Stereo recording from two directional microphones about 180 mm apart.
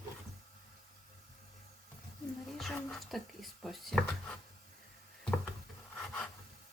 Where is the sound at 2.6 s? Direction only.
Centre (ahead or behind).